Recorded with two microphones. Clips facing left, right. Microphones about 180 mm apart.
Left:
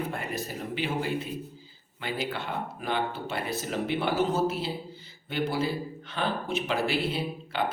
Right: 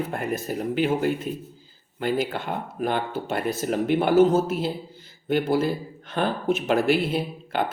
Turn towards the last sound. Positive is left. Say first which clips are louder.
# right 5 dB
turn(degrees=-50)  # may be behind; listen again after turning